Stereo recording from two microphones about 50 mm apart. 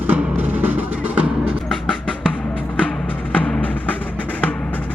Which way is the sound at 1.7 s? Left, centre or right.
Centre.